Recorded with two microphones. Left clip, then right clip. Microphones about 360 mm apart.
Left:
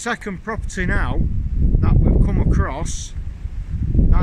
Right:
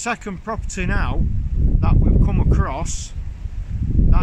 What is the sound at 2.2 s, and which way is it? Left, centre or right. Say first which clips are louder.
Speech: even; centre.